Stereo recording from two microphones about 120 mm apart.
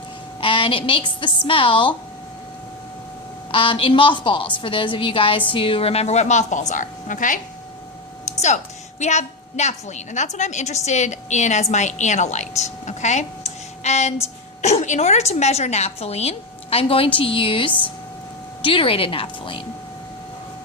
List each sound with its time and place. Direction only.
0.4 s a woman's voice: 45° left (ahead or behind)
3.5 s a woman's voice: 45° left (ahead or behind); by 7.3 s 90° left
8.2 s a woman's voice: 80° left; by 19.6 s 45° left (ahead or behind)